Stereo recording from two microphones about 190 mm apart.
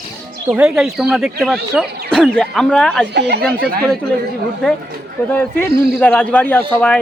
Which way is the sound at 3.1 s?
60° right (ahead or behind).